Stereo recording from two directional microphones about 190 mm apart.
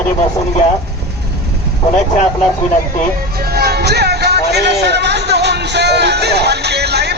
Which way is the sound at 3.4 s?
55° right (ahead or behind).